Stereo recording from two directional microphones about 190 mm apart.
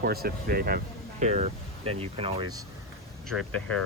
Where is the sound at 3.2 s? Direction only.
5° left (ahead or behind).